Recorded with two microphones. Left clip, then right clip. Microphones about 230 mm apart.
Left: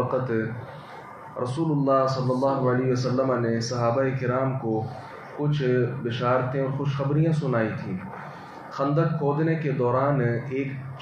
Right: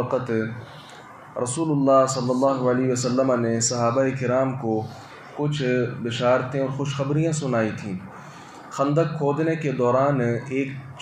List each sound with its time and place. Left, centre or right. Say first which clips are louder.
1.4 s a man's voice: right 3 dB; right
4.7 s speech: right 2 dB; right
5.5 s speech: even; right
8.7 s a man's voice: right 3 dB; right